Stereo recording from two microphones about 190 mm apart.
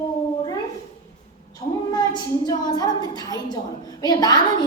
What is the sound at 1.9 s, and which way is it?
A woman's voice, 20° left (ahead or behind).